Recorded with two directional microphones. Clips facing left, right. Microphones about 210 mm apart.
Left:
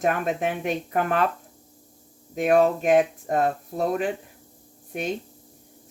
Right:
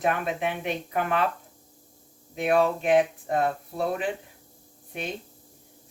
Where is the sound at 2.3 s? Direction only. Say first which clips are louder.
Left 3 dB; 45° left (ahead or behind).